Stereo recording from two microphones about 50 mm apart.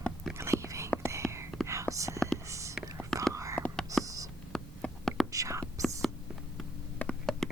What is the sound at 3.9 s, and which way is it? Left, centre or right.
Writing, right.